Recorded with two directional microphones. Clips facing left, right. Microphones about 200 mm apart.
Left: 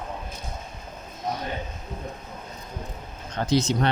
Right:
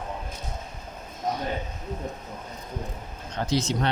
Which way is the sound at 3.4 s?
50° left (ahead or behind).